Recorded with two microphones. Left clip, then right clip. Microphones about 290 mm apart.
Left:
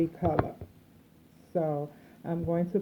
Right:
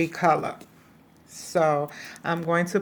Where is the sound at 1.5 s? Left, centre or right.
Right.